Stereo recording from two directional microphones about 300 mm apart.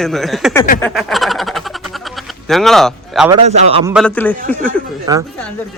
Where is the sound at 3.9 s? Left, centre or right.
Centre.